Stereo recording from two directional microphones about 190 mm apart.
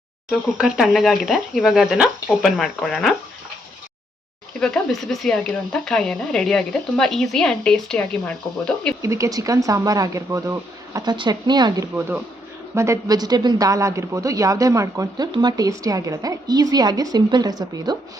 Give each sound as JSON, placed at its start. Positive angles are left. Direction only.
{"t": 0.3, "sound": "speech", "side_deg": -5}
{"t": 4.6, "sound": "speech", "side_deg": 5}
{"t": 9.0, "sound": "speech", "side_deg": -15}
{"t": 11.9, "sound": "a woman's voice", "side_deg": -10}